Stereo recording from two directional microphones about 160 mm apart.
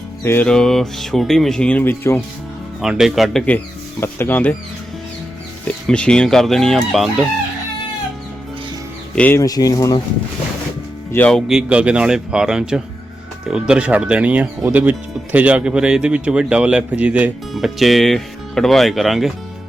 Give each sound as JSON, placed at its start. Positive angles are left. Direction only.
{"t": 0.3, "sound": "speech", "side_deg": 10}
{"t": 2.8, "sound": "speech", "side_deg": -5}
{"t": 5.6, "sound": "speech", "side_deg": 5}
{"t": 9.1, "sound": "speech", "side_deg": 10}
{"t": 9.4, "sound": "speech", "side_deg": 20}
{"t": 11.1, "sound": "speech", "side_deg": 5}